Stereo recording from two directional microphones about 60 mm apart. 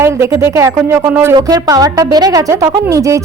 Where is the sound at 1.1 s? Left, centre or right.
Right.